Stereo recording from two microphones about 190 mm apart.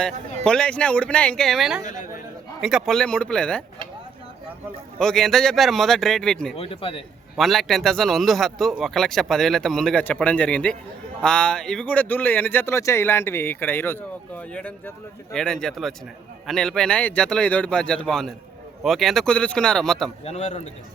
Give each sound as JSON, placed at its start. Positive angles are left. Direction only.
{"t": 0.4, "sound": "speech", "side_deg": 5}
{"t": 4.9, "sound": "speech", "side_deg": 5}
{"t": 6.6, "sound": "speech", "side_deg": 30}
{"t": 7.3, "sound": "speech", "side_deg": 0}
{"t": 20.2, "sound": "a man's voice", "side_deg": 35}